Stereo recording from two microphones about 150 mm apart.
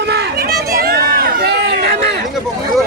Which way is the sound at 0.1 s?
90° right.